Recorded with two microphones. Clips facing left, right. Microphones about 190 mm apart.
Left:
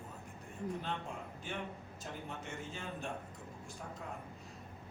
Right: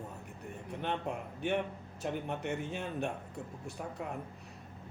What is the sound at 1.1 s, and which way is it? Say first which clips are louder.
A man's voice: right 10 dB; 65° right (ahead or behind).